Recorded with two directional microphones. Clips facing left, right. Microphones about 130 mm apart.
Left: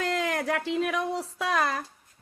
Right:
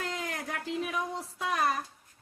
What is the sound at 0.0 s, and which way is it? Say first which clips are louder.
Speech: left 8 dB; 90° left.